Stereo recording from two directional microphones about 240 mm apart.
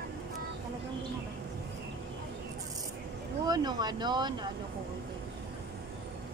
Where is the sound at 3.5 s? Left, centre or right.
Centre.